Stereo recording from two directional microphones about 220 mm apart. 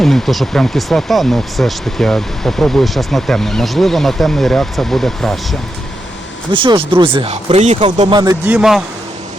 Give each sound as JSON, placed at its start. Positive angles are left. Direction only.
{"t": 0.0, "sound": "speech", "side_deg": 0}
{"t": 6.5, "sound": "speech", "side_deg": -20}
{"t": 8.1, "sound": "speech", "side_deg": -15}
{"t": 8.5, "sound": "speech", "side_deg": 0}